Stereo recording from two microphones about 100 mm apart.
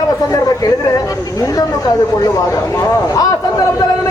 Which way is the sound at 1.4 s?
40° left (ahead or behind).